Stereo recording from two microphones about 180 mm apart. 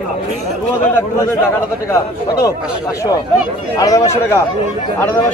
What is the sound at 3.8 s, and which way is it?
Speech, 15° left (ahead or behind).